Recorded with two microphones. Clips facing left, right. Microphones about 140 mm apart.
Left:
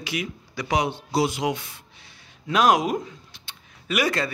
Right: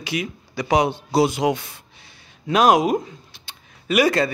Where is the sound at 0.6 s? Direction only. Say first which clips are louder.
Right 5 dB; 30° right (ahead or behind).